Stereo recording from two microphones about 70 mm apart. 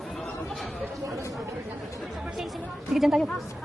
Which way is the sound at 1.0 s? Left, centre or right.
Right.